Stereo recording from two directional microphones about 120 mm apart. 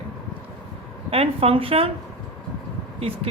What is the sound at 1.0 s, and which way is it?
Speech, 55° right (ahead or behind).